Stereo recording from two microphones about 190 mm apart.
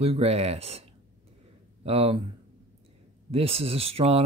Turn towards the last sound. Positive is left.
turn(degrees=-30)  # may be behind; listen again after turning